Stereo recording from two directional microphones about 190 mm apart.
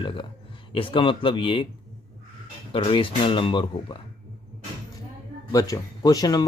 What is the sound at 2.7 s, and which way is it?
Speech, 25° left (ahead or behind).